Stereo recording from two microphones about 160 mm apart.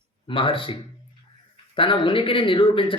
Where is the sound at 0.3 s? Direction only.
30° left (ahead or behind).